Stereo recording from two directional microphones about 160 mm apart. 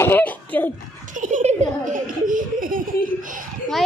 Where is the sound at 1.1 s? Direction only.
50° right (ahead or behind).